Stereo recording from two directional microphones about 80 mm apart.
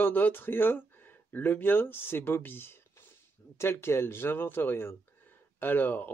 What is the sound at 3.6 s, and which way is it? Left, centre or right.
Speech, left.